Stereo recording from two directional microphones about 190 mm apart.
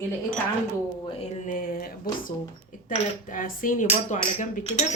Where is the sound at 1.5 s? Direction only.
45° left (ahead or behind).